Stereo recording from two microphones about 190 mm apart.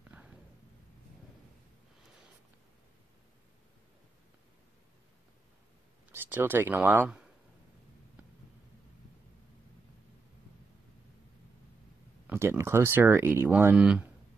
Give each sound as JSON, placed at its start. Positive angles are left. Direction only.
{"t": 0.1, "sound": "a sound", "side_deg": -5}
{"t": 6.1, "sound": "speech", "side_deg": -10}
{"t": 12.3, "sound": "speech", "side_deg": -15}